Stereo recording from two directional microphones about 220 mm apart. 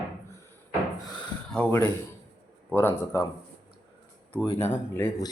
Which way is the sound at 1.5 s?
5° left (ahead or behind).